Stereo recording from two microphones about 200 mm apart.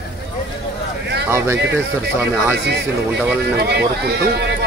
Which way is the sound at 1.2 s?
10° right (ahead or behind).